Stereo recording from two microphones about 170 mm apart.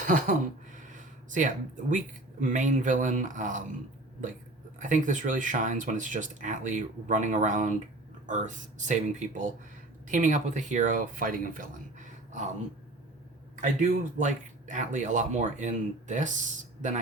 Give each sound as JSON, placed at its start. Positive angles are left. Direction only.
{"t": 0.0, "sound": "a sound", "side_deg": -50}
{"t": 2.4, "sound": "speech", "side_deg": -50}
{"t": 4.8, "sound": "speech", "side_deg": -50}
{"t": 13.6, "sound": "speech", "side_deg": -45}